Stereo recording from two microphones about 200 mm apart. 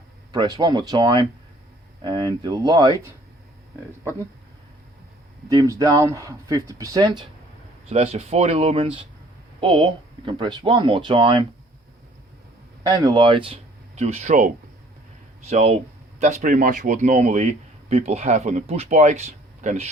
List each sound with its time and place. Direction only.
0.3 s speech: 20° right (ahead or behind)
5.5 s speech: 15° right (ahead or behind)
7.9 s speech: 30° right (ahead or behind)
12.8 s a man's voice: 20° right (ahead or behind); by 19.9 s 35° right (ahead or behind)